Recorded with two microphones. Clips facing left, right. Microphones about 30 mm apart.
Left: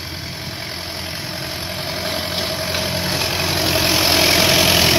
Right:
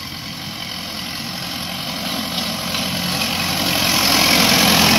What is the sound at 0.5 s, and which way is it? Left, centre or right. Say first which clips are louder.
Vehicle: even; right.